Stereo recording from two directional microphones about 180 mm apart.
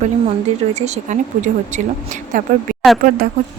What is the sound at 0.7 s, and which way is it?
Speech, 40° right (ahead or behind).